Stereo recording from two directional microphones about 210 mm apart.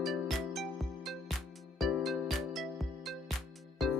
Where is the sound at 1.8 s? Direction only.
Centre (ahead or behind).